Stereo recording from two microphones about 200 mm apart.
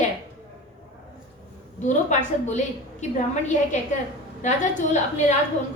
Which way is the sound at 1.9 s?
40° left (ahead or behind).